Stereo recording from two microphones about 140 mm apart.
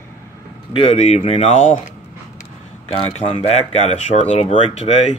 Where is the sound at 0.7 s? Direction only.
50° left (ahead or behind).